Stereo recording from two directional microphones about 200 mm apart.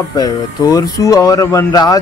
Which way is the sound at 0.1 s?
20° left (ahead or behind).